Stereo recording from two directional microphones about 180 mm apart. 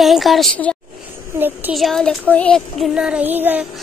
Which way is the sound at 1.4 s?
10° right (ahead or behind).